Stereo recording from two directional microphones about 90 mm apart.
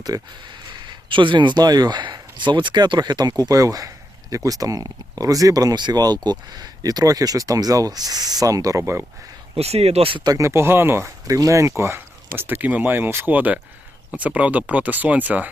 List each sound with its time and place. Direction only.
0.0 s speech: 50° right (ahead or behind)
8.8 s speech: 30° right (ahead or behind)
10.0 s speech: 80° right
10.2 s speech: 35° right (ahead or behind); by 15.4 s 20° right (ahead or behind)